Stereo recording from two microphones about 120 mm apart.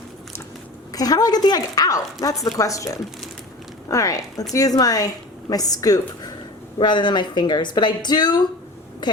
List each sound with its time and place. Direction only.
0.9 s a woman's voice: 30° left (ahead or behind)